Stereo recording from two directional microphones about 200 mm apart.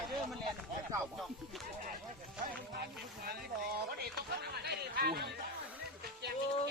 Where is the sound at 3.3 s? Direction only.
50° right (ahead or behind).